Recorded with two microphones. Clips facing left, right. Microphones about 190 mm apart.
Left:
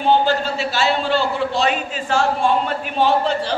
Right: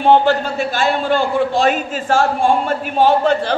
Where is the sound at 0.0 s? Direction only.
65° right (ahead or behind).